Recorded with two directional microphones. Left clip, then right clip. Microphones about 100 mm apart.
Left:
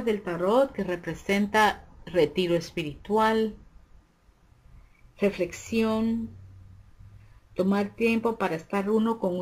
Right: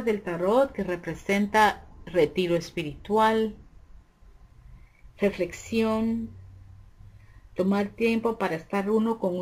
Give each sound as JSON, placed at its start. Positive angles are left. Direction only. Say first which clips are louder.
{"t": 0.0, "sound": "speech", "louder": "even", "side_deg": 0}
{"t": 5.3, "sound": "speech", "louder": "even", "side_deg": 15}
{"t": 5.9, "sound": "speech", "louder": "right 1 dB", "side_deg": 0}
{"t": 7.5, "sound": "speech", "louder": "even", "side_deg": 5}
{"t": 8.2, "sound": "speech", "louder": "even", "side_deg": 0}